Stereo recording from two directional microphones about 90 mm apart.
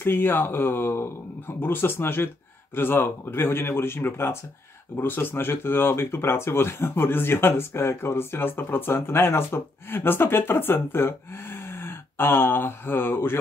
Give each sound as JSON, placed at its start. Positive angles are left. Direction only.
{"t": 0.0, "sound": "speech", "side_deg": 25}